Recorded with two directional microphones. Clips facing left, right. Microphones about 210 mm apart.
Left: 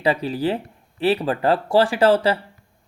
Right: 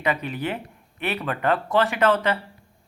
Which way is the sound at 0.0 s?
30° left (ahead or behind).